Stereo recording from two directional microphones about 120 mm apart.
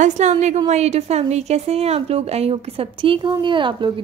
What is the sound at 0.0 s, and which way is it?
A woman's voice, 75° right (ahead or behind).